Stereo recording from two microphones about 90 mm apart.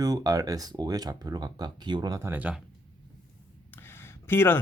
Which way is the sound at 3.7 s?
25° left (ahead or behind).